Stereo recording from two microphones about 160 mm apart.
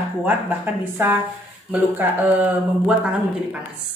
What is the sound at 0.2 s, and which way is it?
Speech, 10° right (ahead or behind).